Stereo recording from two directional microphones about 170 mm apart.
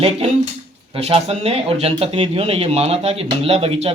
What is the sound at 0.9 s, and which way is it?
Speech, 35° right (ahead or behind).